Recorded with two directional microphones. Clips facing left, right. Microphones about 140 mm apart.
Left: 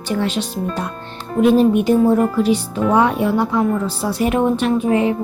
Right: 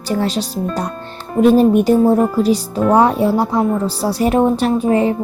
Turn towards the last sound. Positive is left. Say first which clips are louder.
# right 2 dB
turn(degrees=-35)  # may be behind; listen again after turning